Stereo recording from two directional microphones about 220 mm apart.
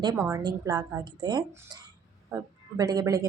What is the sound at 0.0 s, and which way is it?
A woman's voice, 15° right (ahead or behind).